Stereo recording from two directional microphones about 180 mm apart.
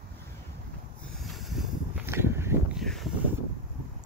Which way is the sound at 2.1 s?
15° right (ahead or behind).